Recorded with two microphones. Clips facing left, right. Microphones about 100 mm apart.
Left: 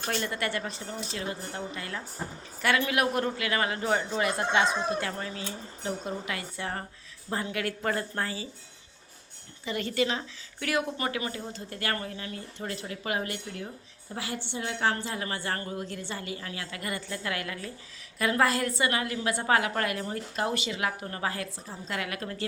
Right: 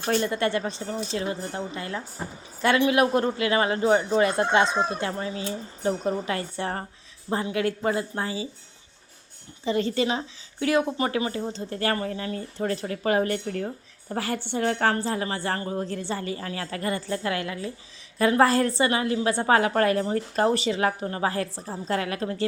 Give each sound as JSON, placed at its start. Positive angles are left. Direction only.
{"t": 0.2, "sound": "speech", "side_deg": -25}
{"t": 5.5, "sound": "a woman's voice", "side_deg": -35}
{"t": 9.6, "sound": "a woman's voice", "side_deg": -30}